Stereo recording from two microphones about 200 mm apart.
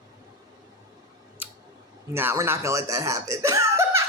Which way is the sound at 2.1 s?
10° right (ahead or behind).